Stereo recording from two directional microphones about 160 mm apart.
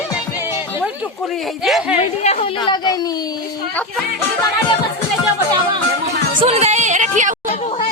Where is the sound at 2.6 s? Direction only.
25° left (ahead or behind).